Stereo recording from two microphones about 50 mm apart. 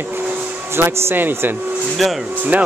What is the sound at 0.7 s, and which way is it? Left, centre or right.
Speech, right.